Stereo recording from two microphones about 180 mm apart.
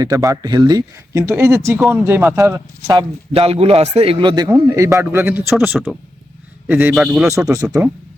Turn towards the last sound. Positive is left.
turn(degrees=-20)  # may be behind; listen again after turning